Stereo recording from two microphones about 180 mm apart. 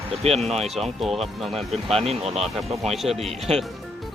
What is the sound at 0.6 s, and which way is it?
Speech, centre (ahead or behind).